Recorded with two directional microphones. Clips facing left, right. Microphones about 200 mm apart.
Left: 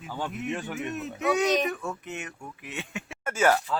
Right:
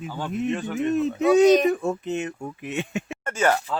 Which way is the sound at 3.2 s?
5° left (ahead or behind).